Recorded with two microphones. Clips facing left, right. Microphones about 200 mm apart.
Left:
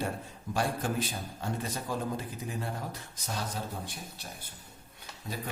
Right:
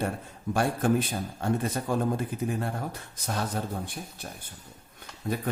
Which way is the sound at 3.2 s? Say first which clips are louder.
Right 6 dB; 55° right (ahead or behind).